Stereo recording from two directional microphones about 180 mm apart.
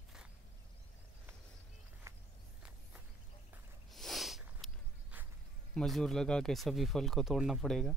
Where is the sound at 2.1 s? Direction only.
15° right (ahead or behind).